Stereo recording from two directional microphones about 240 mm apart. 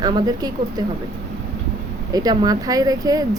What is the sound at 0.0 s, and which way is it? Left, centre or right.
Speech, centre.